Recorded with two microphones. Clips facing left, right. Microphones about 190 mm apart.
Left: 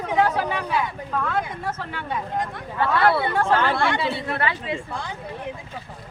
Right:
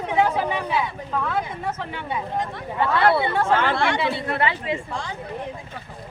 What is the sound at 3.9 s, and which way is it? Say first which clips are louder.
Speech: right 1 dB; 20° right (ahead or behind).